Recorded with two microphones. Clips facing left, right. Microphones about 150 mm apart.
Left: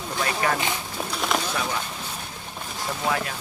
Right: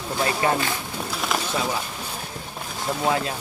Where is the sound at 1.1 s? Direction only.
Centre (ahead or behind).